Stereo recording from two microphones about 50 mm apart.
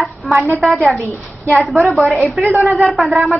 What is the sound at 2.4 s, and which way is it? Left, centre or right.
Speech, right.